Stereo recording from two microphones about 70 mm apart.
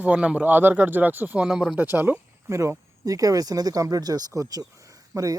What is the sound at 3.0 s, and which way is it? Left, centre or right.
Speech, right.